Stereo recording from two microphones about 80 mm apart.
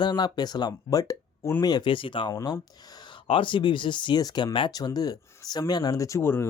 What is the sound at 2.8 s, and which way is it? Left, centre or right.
Speech, left.